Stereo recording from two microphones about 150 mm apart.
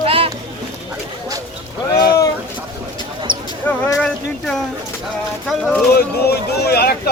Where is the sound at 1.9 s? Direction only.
25° left (ahead or behind).